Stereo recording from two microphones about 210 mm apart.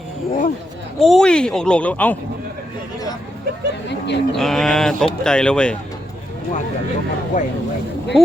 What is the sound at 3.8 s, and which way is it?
Livestock, 55° left (ahead or behind).